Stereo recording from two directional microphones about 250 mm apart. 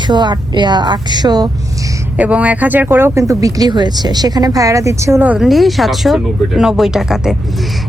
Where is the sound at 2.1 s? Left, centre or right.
Centre.